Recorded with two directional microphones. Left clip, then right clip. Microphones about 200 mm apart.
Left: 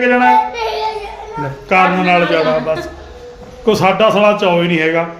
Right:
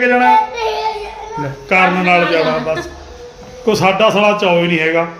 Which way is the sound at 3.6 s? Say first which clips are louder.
Left 1 dB; 15° left (ahead or behind).